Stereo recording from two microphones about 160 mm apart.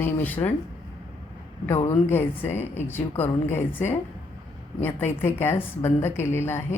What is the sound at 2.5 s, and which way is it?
Speech, 45° left (ahead or behind).